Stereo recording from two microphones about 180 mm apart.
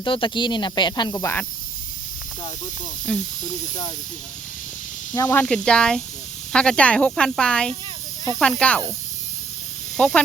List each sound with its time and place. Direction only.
0.0 s speech: 25° left (ahead or behind)
3.1 s speech: 10° left (ahead or behind)
5.1 s speech: 15° left (ahead or behind)
10.0 s speech: 5° left (ahead or behind)